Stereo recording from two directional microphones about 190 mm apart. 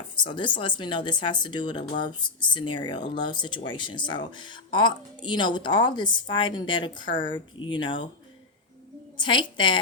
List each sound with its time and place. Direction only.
0.2 s speech: 25° left (ahead or behind)
9.1 s speech: 25° left (ahead or behind)